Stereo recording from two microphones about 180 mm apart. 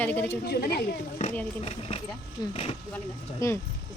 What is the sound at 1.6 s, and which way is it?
Speech, 35° left (ahead or behind).